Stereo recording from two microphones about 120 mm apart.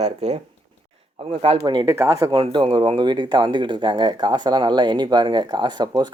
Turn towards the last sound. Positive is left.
turn(degrees=-35)  # may be behind; listen again after turning